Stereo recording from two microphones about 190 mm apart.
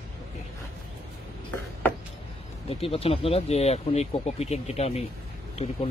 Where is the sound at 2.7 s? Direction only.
30° left (ahead or behind).